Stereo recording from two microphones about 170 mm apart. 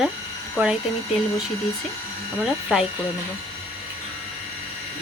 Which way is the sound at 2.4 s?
5° right (ahead or behind).